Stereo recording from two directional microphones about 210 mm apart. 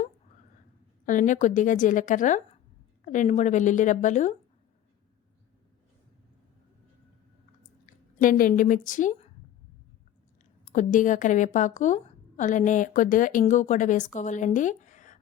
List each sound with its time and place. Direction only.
1.0 s a woman's voice: 40° left (ahead or behind)
8.2 s a woman's voice: 40° left (ahead or behind)
10.8 s a woman's voice: 35° left (ahead or behind)